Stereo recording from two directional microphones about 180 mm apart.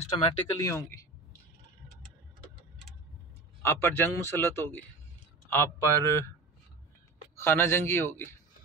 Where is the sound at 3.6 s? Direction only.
10° left (ahead or behind).